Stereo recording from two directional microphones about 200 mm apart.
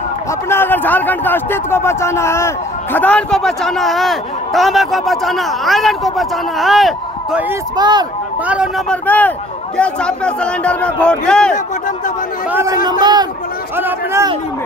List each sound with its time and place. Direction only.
0.5 s speech: 10° left (ahead or behind); by 7.5 s 5° right (ahead or behind)
7.7 s speech: 20° right (ahead or behind)
8.5 s speech: centre (ahead or behind)
12.4 s speech: 10° right (ahead or behind)